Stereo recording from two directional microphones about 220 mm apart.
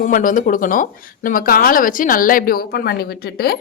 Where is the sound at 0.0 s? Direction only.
35° left (ahead or behind).